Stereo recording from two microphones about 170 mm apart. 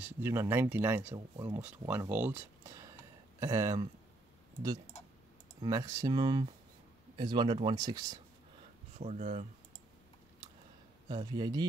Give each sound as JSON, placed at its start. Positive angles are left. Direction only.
{"t": 0.0, "sound": "speech", "side_deg": -15}
{"t": 5.6, "sound": "speech", "side_deg": -20}
{"t": 8.9, "sound": "speech", "side_deg": -45}
{"t": 11.1, "sound": "speech", "side_deg": -25}